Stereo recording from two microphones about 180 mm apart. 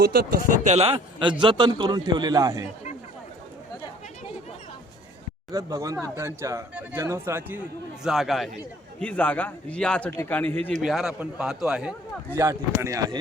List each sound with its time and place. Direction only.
0.0 s speech: 60° right (ahead or behind)
0.7 s a man's voice: 35° right (ahead or behind)
5.5 s a man's voice: 20° right (ahead or behind); by 10.8 s 10° left (ahead or behind)
10.8 s a man's voice: centre (ahead or behind)
12.4 s a man's voice: 15° right (ahead or behind)